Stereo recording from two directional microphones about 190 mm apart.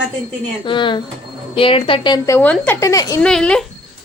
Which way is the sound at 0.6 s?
25° left (ahead or behind).